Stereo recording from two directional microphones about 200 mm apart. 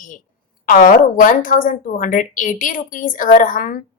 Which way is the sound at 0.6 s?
45° left (ahead or behind).